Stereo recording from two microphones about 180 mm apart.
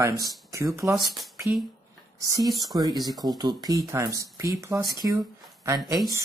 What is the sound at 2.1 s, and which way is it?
Speech, 20° right (ahead or behind).